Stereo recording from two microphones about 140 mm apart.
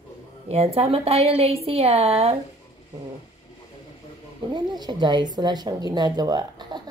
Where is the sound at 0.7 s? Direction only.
45° right (ahead or behind).